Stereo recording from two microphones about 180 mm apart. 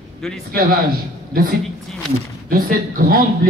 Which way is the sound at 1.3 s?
55° right (ahead or behind).